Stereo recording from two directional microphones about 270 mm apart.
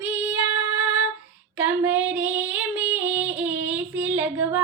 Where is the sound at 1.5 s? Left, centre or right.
Centre.